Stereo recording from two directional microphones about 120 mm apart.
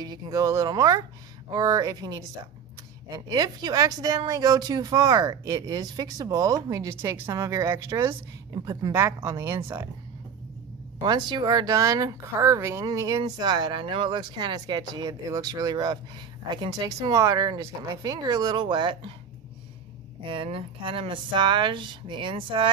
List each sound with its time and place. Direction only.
0.0 s speech: 30° right (ahead or behind)
11.0 s speech: 40° right (ahead or behind)
20.2 s speech: 50° right (ahead or behind)